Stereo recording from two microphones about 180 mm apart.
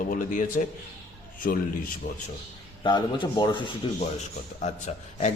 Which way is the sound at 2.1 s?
40° left (ahead or behind).